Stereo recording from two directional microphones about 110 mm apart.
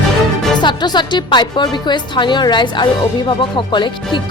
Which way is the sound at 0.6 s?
40° left (ahead or behind).